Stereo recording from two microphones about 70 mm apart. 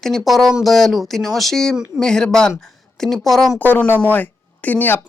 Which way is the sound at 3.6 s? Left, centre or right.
Left.